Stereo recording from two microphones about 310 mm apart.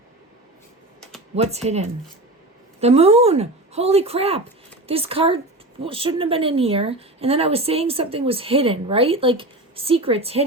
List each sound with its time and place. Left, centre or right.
1.6 s a woman's voice: right